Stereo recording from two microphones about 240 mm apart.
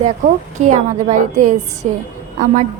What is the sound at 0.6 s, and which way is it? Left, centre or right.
A woman's voice, right.